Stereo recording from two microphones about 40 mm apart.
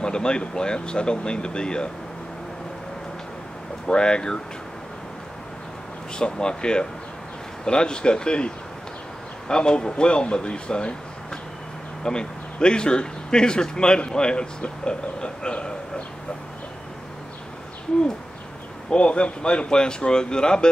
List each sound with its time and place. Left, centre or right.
0.0 s speech: left
3.8 s speech: left
6.1 s speech: left
12.0 s speech: left
18.9 s speech: left